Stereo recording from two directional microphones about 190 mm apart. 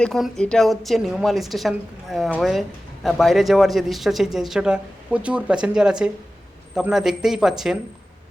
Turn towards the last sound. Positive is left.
turn(degrees=0)  # may be behind; listen again after turning